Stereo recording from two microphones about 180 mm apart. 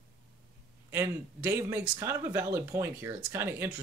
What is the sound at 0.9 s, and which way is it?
Speech, 15° right (ahead or behind).